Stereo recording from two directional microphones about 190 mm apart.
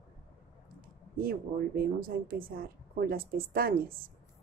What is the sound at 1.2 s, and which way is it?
Speech, 50° right (ahead or behind).